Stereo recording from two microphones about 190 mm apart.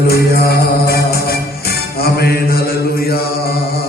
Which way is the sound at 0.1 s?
55° left (ahead or behind).